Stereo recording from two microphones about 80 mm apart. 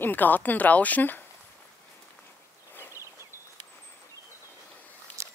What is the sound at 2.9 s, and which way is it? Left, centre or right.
Walk, right.